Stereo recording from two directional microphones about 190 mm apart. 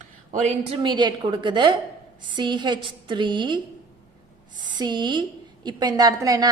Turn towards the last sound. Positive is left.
turn(degrees=-20)  # may be behind; listen again after turning